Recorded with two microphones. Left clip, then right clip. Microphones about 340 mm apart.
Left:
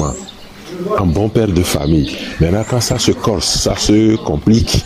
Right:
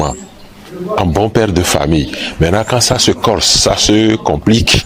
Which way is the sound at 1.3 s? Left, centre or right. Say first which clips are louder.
Right 3 dB; right.